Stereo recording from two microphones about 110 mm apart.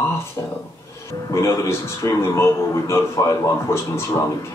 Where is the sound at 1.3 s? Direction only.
30° left (ahead or behind).